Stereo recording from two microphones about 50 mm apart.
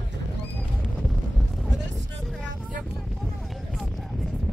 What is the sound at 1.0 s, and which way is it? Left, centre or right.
Wind noise, centre.